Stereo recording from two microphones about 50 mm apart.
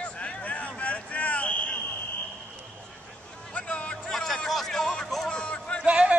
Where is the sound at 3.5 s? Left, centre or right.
Left.